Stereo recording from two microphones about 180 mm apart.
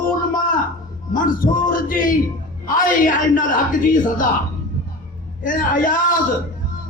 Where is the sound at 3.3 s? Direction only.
50° left (ahead or behind).